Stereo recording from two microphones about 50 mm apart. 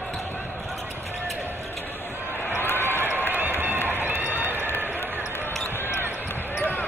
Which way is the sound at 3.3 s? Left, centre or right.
Right.